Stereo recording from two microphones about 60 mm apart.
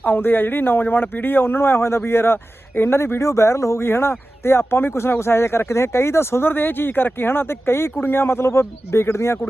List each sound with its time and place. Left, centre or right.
0.0 s speech: left
3.8 s speech: left